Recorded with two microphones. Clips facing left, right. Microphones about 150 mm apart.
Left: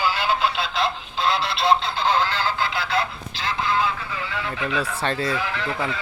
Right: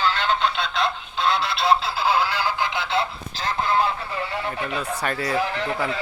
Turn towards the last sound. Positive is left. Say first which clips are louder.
# right 1 dB
turn(degrees=-40)  # may be behind; listen again after turning